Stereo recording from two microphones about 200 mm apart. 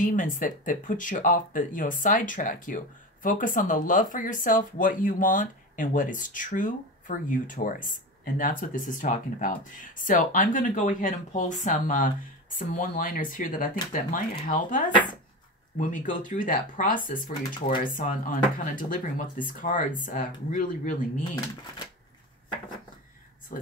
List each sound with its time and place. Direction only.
0.0 s speech: 40° left (ahead or behind)
15.9 s speech: 40° left (ahead or behind)